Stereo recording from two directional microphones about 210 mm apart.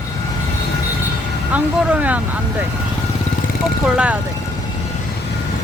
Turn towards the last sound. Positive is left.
turn(degrees=-5)  # may be behind; listen again after turning